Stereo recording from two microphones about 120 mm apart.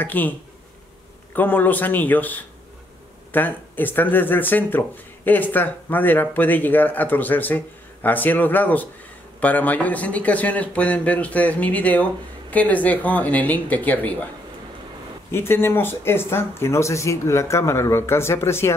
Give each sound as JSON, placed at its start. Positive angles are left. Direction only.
{"t": 0.0, "sound": "speech", "side_deg": 15}
{"t": 1.3, "sound": "speech", "side_deg": 15}
{"t": 15.3, "sound": "speech", "side_deg": 20}